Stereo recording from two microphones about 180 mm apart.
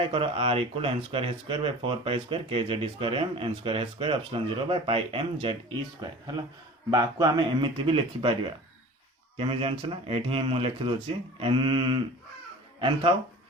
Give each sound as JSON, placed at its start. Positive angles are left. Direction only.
{"t": 0.1, "sound": "speech", "side_deg": -30}